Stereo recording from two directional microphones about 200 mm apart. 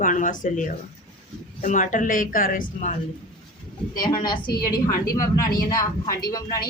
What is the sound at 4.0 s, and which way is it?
A woman's voice, 20° left (ahead or behind).